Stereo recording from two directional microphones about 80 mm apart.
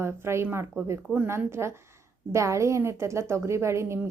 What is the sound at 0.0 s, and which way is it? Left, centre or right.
A woman's voice, right.